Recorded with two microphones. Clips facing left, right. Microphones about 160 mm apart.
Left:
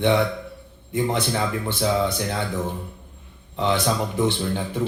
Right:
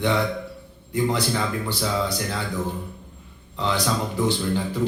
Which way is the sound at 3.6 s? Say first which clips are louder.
Left 2 dB; 20° left (ahead or behind).